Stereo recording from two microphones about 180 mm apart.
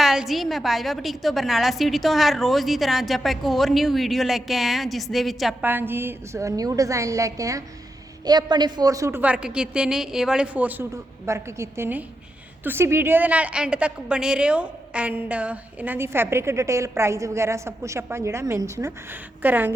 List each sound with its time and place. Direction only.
0.0 s a woman's voice: centre (ahead or behind)
5.6 s a woman's voice: 10° right (ahead or behind)